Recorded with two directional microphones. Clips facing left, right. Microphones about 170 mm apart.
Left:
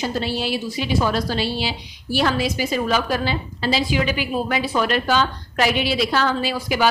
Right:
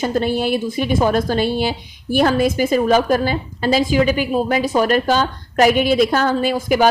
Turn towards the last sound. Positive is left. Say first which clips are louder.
# right 6 dB
turn(degrees=-50)  # may be behind; listen again after turning